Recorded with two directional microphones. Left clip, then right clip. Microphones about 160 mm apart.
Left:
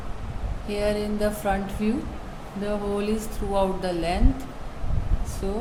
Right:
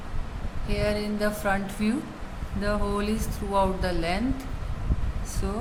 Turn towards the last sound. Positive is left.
turn(degrees=-25)  # may be behind; listen again after turning